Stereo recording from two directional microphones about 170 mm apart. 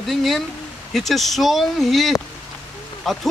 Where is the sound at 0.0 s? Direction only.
Centre (ahead or behind).